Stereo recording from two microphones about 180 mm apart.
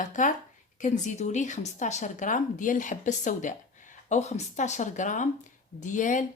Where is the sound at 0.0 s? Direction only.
45° left (ahead or behind).